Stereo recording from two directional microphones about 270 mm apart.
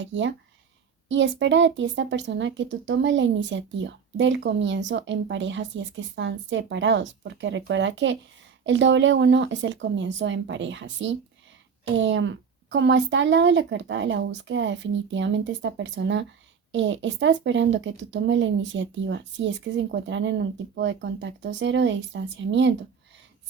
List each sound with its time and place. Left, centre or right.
0.0 s speech: right